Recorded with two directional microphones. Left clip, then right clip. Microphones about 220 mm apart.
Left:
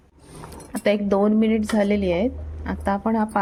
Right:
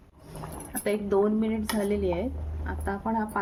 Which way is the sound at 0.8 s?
35° left (ahead or behind).